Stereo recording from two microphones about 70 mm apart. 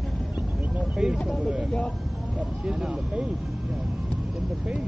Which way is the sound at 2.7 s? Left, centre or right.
Centre.